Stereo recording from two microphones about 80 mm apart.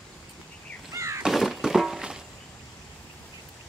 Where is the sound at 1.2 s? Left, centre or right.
Centre.